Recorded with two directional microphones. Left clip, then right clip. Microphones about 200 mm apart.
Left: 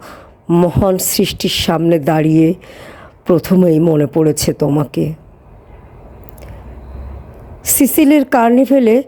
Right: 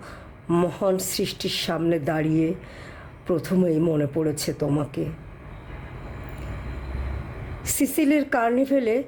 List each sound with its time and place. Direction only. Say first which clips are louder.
0.4 s speech: left 9 dB; 30° left (ahead or behind)
7.6 s speech: left 11 dB; 40° left (ahead or behind)